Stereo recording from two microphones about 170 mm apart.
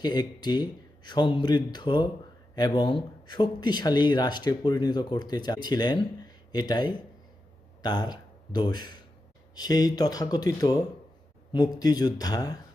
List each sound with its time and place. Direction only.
0.0 s speech: 25° left (ahead or behind)